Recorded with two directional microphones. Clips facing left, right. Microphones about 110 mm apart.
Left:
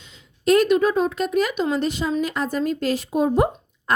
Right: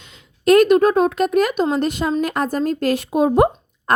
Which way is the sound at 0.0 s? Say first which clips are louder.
Right 4 dB; 60° right (ahead or behind).